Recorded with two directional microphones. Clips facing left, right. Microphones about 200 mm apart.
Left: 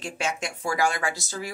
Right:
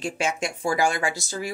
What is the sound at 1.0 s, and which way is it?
Speech, 20° right (ahead or behind).